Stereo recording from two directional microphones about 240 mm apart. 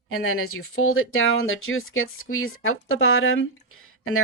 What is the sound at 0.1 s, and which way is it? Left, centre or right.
Speech, left.